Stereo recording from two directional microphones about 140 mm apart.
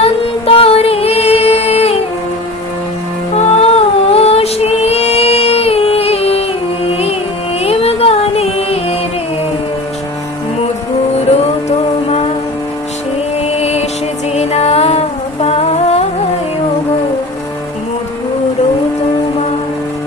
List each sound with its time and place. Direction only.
0.0 s music: 45° left (ahead or behind)
3.3 s music: 50° left (ahead or behind)
7.6 s music: 45° left (ahead or behind)
11.3 s music: 50° left (ahead or behind)
13.4 s music: 50° left (ahead or behind)